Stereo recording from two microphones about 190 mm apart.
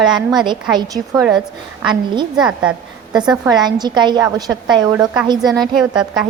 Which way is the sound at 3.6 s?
20° right (ahead or behind).